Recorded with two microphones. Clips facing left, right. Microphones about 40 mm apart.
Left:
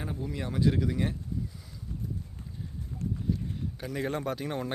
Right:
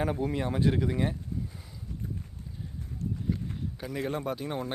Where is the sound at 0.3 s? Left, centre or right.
Right.